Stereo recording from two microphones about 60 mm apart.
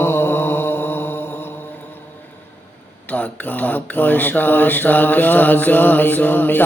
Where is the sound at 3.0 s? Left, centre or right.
Left.